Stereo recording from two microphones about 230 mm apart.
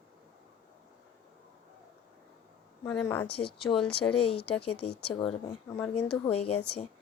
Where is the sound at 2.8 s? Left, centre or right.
Centre.